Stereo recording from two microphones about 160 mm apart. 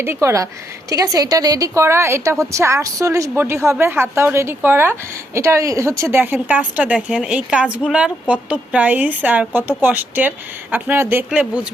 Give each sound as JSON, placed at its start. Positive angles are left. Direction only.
{"t": 0.0, "sound": "a woman's voice", "side_deg": -15}